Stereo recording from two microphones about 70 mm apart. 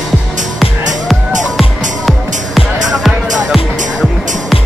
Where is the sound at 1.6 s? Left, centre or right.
Centre.